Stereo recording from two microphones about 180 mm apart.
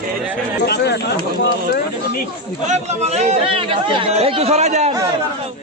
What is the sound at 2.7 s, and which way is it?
A man's voice, 40° right (ahead or behind).